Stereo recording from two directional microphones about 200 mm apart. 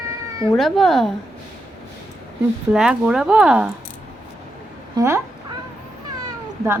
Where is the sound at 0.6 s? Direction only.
Centre (ahead or behind).